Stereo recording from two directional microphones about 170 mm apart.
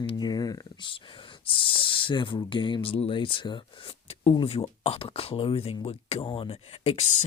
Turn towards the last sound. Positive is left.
turn(degrees=40)  # may be behind; listen again after turning